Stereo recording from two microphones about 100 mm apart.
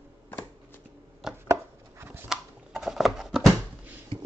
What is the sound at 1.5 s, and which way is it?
Chopping, 25° right (ahead or behind).